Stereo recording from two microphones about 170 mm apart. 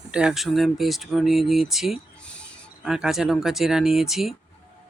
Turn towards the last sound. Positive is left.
turn(degrees=0)  # may be behind; listen again after turning